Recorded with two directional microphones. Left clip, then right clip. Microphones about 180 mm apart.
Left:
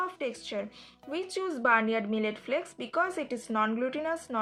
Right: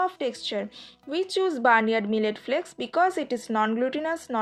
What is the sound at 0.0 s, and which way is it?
Speech, 40° right (ahead or behind).